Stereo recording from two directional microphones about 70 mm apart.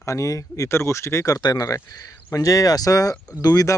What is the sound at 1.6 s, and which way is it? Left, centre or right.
Speech, left.